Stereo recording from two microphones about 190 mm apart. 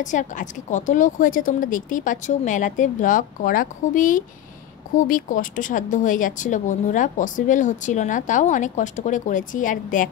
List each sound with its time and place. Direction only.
0.0 s a woman's voice: 40° left (ahead or behind)